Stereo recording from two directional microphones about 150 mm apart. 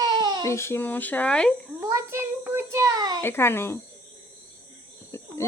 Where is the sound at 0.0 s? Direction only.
30° right (ahead or behind).